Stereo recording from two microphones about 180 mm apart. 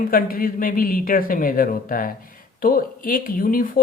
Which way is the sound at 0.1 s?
50° left (ahead or behind).